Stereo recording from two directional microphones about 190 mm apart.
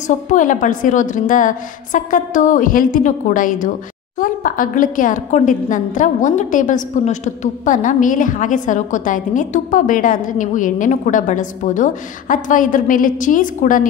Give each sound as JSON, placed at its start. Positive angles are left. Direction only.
{"t": 0.0, "sound": "a woman's voice", "side_deg": 40}